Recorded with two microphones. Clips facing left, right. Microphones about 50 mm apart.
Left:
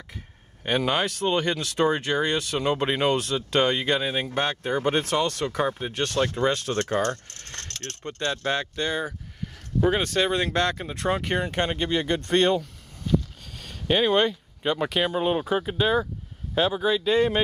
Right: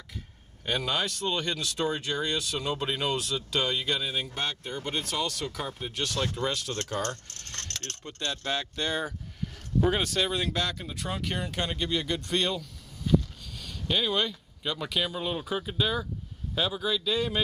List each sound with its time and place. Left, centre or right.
0.7 s speech: left
7.0 s speech: left
10.0 s speech: left